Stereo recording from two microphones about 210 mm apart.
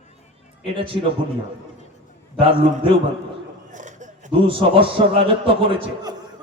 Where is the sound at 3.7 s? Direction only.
35° right (ahead or behind).